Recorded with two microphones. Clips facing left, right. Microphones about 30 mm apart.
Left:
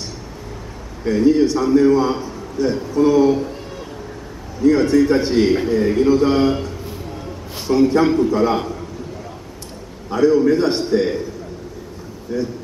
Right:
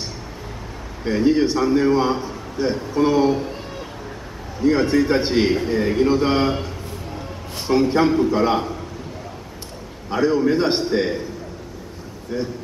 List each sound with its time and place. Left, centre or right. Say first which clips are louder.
1.0 s a man's voice: left 3 dB; right
2.2 s a sound: left 2 dB; right
3.0 s a man's voice: left 3 dB; right
4.6 s a man's voice: left 3 dB; centre
7.1 s a sound: left 1 dB; centre
8.2 s a man's voice: left 2 dB; centre
10.0 s a man's voice: left 4 dB; right
12.3 s a man's voice: left 3 dB; centre